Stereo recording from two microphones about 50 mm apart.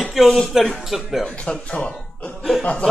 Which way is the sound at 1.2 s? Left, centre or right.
Centre.